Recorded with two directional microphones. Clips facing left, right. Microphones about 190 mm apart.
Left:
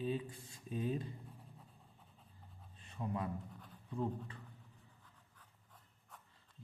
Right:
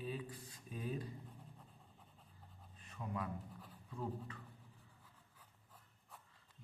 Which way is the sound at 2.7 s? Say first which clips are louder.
Left 3 dB; 30° left (ahead or behind).